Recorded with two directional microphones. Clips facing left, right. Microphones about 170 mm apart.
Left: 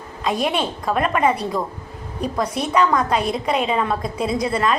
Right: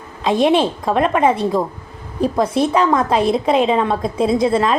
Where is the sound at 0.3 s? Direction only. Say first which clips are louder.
Right 7 dB; 25° right (ahead or behind).